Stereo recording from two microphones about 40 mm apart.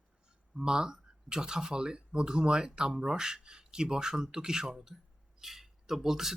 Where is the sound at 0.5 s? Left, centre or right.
Centre.